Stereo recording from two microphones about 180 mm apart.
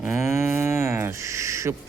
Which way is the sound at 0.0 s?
10° right (ahead or behind).